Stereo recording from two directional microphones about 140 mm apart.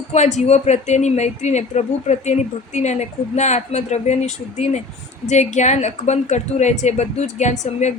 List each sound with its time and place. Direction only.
0.1 s speech: 55° left (ahead or behind)